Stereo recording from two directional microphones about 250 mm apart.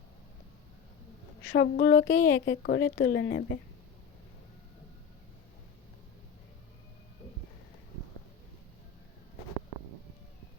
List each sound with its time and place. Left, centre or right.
1.5 s a woman's voice: left